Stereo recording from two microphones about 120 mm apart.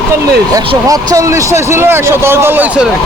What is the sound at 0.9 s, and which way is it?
Speech, 30° right (ahead or behind).